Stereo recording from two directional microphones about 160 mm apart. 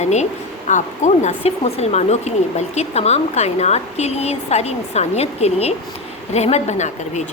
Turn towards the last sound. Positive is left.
turn(degrees=45)  # may be behind; listen again after turning